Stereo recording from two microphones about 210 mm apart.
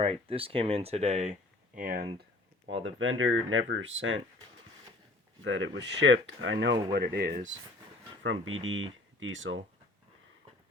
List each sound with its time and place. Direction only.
0.3 s speech: 25° right (ahead or behind); by 2.0 s 40° right (ahead or behind)
2.6 s speech: 65° right (ahead or behind)
5.4 s speech: 60° right (ahead or behind)
6.9 s speech: 45° right (ahead or behind)
8.2 s speech: 70° right (ahead or behind)